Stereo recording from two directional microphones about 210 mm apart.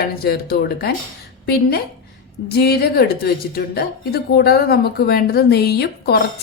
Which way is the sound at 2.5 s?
50° left (ahead or behind).